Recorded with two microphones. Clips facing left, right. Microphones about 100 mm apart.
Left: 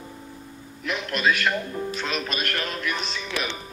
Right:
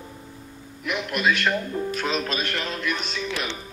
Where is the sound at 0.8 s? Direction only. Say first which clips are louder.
Even; 5° right (ahead or behind).